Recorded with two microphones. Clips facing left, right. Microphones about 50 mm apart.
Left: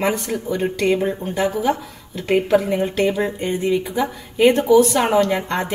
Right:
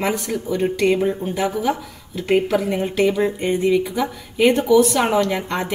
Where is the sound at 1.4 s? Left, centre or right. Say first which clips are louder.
Left 2 dB; left.